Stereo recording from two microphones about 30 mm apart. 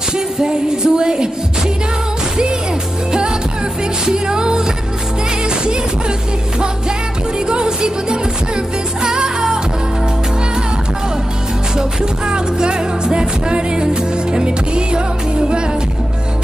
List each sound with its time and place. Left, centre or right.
0.4 s music: right
3.1 s music: right
7.4 s music: right
11.7 s music: right